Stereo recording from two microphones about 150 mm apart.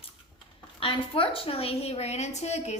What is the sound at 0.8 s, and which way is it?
A woman's voice, 35° left (ahead or behind).